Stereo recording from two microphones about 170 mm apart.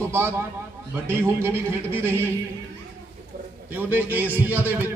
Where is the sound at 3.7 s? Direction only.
10° right (ahead or behind).